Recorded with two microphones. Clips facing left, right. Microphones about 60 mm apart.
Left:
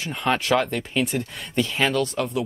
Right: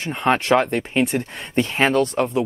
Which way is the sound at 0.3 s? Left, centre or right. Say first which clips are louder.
Right 4 dB; right.